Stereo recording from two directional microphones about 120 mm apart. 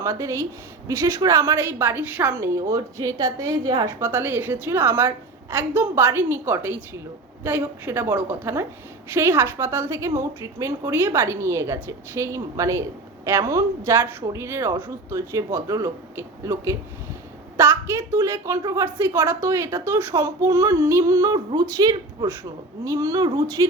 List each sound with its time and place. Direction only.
0.0 s a woman's voice: 25° right (ahead or behind)
3.8 s a woman's voice: 20° right (ahead or behind)